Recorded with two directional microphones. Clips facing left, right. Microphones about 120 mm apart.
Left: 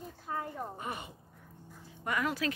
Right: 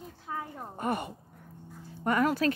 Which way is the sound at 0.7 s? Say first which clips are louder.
Right 9 dB; 50° right (ahead or behind).